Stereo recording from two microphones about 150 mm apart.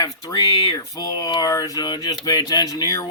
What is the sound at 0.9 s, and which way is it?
Speech, 25° left (ahead or behind).